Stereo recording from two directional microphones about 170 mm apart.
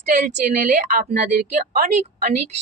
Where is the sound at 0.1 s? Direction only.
45° right (ahead or behind).